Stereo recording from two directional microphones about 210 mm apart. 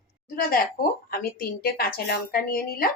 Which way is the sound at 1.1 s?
45° left (ahead or behind).